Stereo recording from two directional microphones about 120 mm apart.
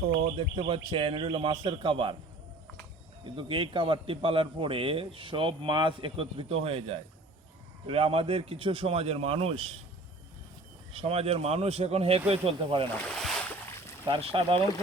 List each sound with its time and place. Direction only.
0.1 s a man's voice: 45° right (ahead or behind)
3.2 s a man's voice: 45° right (ahead or behind)
10.9 s a man's voice: 55° right (ahead or behind)
13.1 s boat: centre (ahead or behind)
13.7 s a sound: 20° left (ahead or behind)
14.1 s a man's voice: 50° right (ahead or behind)